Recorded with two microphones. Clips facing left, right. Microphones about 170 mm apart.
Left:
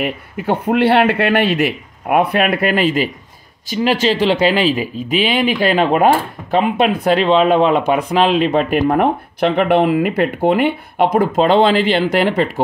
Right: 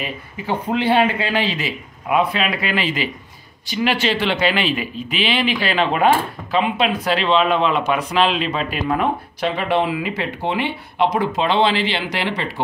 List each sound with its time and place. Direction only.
0.0 s speech: 60° left (ahead or behind); by 12.6 s 45° left (ahead or behind)